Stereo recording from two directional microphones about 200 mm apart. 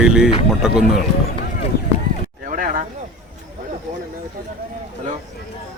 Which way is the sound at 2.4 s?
40° right (ahead or behind).